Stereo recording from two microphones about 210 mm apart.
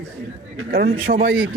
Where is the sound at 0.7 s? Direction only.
45° right (ahead or behind).